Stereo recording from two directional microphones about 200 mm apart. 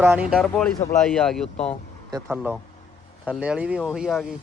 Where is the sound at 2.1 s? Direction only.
10° right (ahead or behind).